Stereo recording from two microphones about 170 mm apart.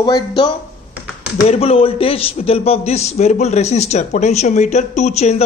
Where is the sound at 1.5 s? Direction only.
35° left (ahead or behind).